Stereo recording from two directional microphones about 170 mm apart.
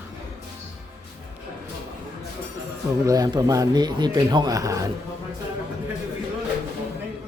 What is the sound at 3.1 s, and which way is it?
A man's voice, 20° right (ahead or behind).